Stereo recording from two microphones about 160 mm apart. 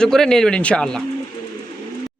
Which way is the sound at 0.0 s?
5° left (ahead or behind).